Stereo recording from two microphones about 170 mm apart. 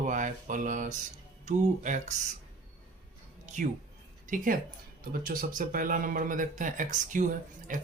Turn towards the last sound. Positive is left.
turn(degrees=-50)  # may be behind; listen again after turning